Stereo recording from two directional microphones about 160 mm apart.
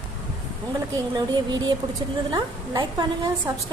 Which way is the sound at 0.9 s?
25° right (ahead or behind).